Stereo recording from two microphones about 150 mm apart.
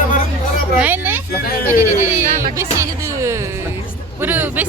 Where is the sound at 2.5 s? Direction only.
20° right (ahead or behind).